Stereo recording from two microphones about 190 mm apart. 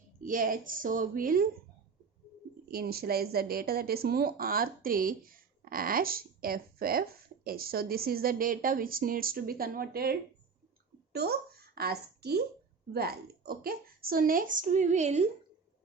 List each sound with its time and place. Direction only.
0.2 s speech: 45° right (ahead or behind)
2.6 s a woman's voice: 55° right (ahead or behind); by 15.3 s 35° right (ahead or behind)